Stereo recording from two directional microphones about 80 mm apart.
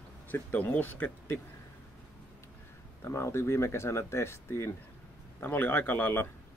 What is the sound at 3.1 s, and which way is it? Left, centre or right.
Speech, left.